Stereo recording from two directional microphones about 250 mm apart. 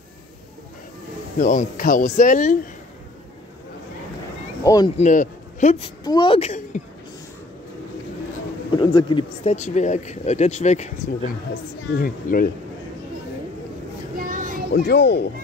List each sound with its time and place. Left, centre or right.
1.4 s speech: left
4.6 s speech: centre
4.9 s speech: left
8.7 s speech: centre; by 12.4 s left
14.1 s children playing: right
14.7 s speech: left